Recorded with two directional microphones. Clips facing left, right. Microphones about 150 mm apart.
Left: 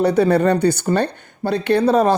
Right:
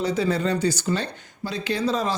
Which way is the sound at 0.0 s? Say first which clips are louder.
Left 8 dB; 60° left (ahead or behind).